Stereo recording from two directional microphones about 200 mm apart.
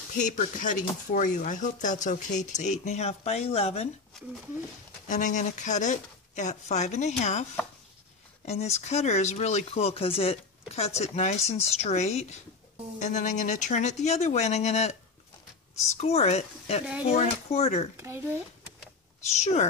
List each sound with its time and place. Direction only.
0.2 s speech: 40° left (ahead or behind)
5.0 s speech: 40° left (ahead or behind)
8.5 s speech: 35° left (ahead or behind)
16.0 s speech: 30° left (ahead or behind)
17.9 s speech: 10° right (ahead or behind)
19.4 s speech: 35° left (ahead or behind)